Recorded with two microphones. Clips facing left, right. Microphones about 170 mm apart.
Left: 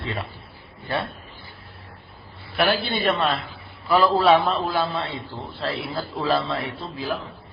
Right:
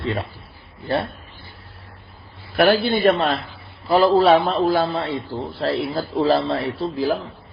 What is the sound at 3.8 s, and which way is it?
A man's voice, 35° right (ahead or behind).